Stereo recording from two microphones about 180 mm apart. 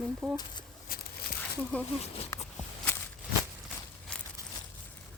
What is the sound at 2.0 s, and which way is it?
Speech, 35° left (ahead or behind).